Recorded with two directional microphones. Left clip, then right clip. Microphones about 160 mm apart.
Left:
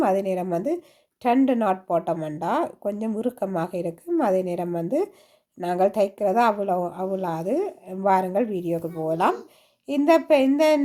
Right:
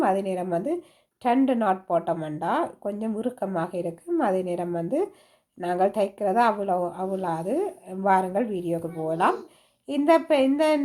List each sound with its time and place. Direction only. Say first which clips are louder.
0.0 s speech: left 2 dB; 30° left (ahead or behind)